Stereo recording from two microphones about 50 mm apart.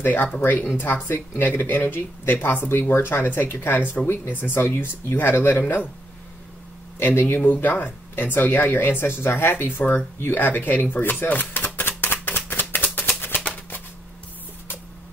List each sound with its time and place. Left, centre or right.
0.0 s speech: left
1.3 s speech: left
1.6 s speech: left
3.7 s speech: left
7.0 s speech: left
12.0 s a sound: left
13.2 s music: left